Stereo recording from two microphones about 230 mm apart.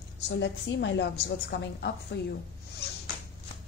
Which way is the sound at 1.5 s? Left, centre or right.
Left.